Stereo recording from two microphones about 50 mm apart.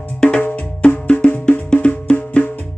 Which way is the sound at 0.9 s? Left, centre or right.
Left.